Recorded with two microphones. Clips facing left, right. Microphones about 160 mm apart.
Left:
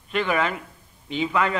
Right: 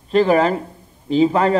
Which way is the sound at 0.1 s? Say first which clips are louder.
Right 9 dB; 35° right (ahead or behind).